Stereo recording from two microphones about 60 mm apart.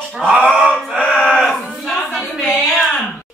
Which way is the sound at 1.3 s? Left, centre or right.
Centre.